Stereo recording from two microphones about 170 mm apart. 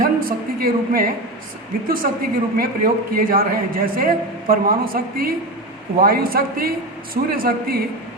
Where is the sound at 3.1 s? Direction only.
55° right (ahead or behind).